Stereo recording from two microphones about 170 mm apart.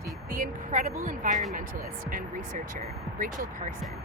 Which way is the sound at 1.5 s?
55° right (ahead or behind).